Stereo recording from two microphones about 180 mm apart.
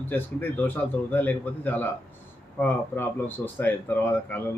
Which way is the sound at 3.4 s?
10° left (ahead or behind).